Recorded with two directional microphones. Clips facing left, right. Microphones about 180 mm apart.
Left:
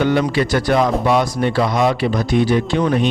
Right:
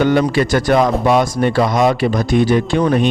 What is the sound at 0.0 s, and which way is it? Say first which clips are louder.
A man's voice: right 3 dB; 45° right (ahead or behind).